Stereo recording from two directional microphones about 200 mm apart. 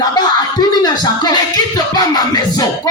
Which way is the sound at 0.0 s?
20° left (ahead or behind).